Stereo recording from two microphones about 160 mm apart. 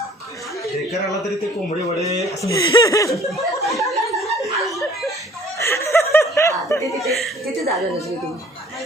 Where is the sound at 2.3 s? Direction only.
20° left (ahead or behind).